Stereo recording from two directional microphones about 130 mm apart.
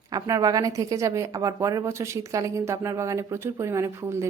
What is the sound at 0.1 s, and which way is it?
A woman's voice, 30° right (ahead or behind).